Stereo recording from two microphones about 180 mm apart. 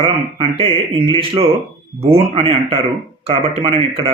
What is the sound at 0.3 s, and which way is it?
Speech, 30° right (ahead or behind).